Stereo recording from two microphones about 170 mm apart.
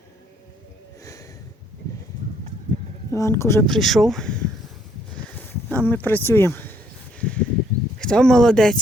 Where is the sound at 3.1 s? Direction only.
15° left (ahead or behind).